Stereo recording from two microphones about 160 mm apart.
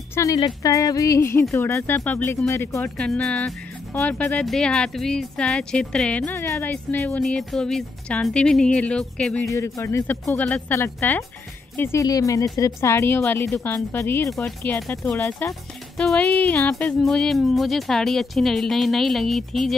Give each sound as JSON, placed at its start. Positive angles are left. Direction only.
{"t": 0.1, "sound": "music", "side_deg": 20}
{"t": 1.5, "sound": "speech", "side_deg": 15}
{"t": 9.5, "sound": "speech", "side_deg": 20}
{"t": 11.7, "sound": "music", "side_deg": 15}
{"t": 12.5, "sound": "speech", "side_deg": 20}
{"t": 14.3, "sound": "speech", "side_deg": 5}